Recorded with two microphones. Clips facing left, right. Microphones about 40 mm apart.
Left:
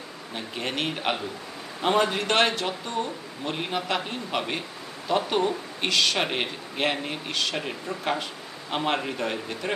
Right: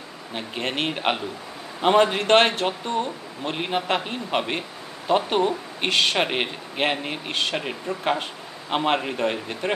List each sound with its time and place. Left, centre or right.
0.3 s speech: right
6.1 s a man's voice: centre